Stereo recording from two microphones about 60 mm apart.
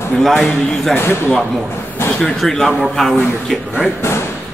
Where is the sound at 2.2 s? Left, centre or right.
Centre.